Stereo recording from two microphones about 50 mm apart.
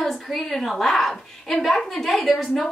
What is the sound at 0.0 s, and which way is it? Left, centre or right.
A woman's voice, centre.